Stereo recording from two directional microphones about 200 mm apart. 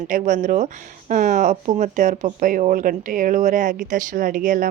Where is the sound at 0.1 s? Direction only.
40° right (ahead or behind).